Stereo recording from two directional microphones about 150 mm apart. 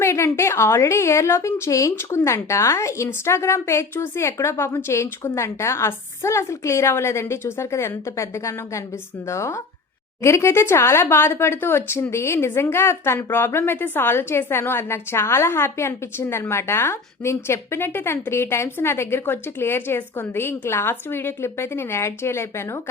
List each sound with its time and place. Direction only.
0.0 s a woman's voice: 20° left (ahead or behind)